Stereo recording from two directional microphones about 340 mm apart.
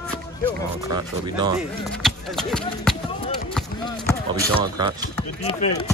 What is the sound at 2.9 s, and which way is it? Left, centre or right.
Basketball bounce, centre.